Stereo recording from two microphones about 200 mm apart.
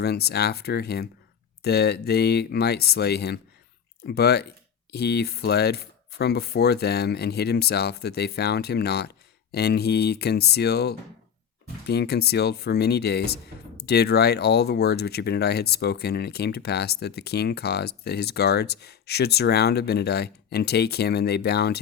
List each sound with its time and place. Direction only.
0.0 s speech: 55° left (ahead or behind)